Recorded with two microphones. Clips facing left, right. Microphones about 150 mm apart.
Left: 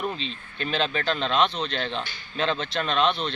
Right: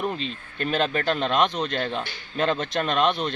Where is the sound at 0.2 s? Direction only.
50° right (ahead or behind).